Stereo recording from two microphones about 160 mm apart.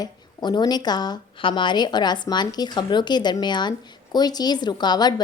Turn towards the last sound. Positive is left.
turn(degrees=25)  # may be behind; listen again after turning